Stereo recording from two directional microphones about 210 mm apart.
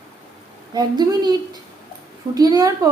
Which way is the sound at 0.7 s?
20° right (ahead or behind).